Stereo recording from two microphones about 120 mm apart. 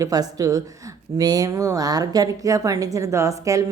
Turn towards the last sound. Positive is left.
turn(degrees=-25)  # may be behind; listen again after turning